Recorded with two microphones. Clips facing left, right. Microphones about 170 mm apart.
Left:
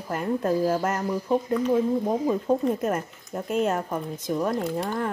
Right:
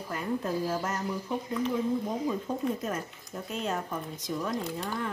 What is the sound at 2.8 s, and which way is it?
A woman's voice, 55° left (ahead or behind).